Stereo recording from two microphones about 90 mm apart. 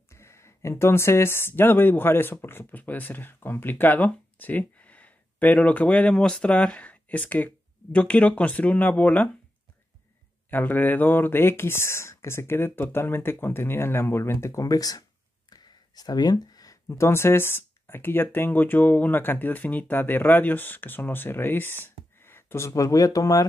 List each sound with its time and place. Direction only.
0.1 s a woman's voice: 30° left (ahead or behind)
10.5 s speech: 20° left (ahead or behind); by 15.0 s 45° left (ahead or behind)
15.5 s a sound: 50° left (ahead or behind)
16.8 s speech: 30° left (ahead or behind)
22.7 s speech: 40° left (ahead or behind)